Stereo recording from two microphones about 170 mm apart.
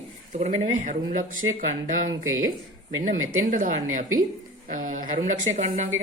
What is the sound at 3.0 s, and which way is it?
A woman's voice, 50° right (ahead or behind).